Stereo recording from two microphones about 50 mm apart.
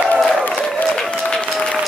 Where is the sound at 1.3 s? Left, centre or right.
Centre.